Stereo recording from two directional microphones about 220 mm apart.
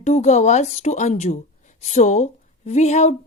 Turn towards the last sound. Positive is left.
turn(degrees=30)  # may be behind; listen again after turning